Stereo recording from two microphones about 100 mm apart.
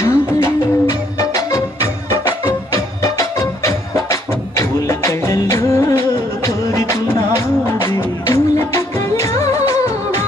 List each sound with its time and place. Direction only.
0.0 s music: 30° left (ahead or behind)